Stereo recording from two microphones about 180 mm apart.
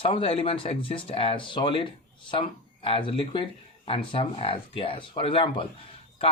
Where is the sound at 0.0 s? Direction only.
30° left (ahead or behind).